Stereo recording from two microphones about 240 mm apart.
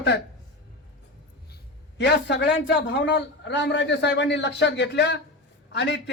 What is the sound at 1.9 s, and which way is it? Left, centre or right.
A man's voice, left.